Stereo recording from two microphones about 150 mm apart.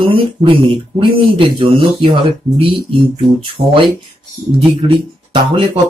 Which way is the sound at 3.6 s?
40° right (ahead or behind).